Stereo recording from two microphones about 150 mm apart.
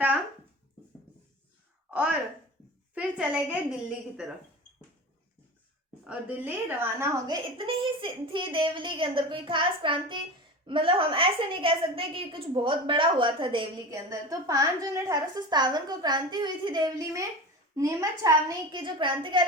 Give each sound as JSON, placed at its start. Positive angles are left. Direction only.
{"t": 2.9, "sound": "a woman's voice", "side_deg": -10}
{"t": 6.1, "sound": "a woman's voice", "side_deg": -10}
{"t": 7.3, "sound": "a woman's voice", "side_deg": -30}
{"t": 13.9, "sound": "a woman's voice", "side_deg": -20}